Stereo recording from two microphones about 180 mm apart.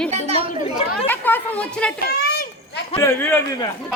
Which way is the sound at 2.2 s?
60° left (ahead or behind).